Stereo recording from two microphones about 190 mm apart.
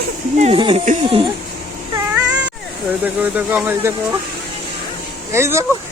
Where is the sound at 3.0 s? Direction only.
10° right (ahead or behind).